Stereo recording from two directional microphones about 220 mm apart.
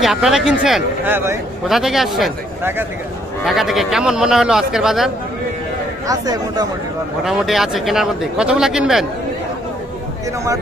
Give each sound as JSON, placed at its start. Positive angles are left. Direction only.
{"t": 0.0, "sound": "speech", "side_deg": 0}
{"t": 6.1, "sound": "speech", "side_deg": -15}
{"t": 7.3, "sound": "speech", "side_deg": 0}